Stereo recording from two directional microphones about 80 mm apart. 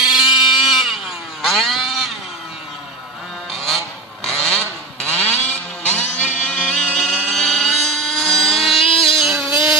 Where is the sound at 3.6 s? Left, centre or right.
Centre.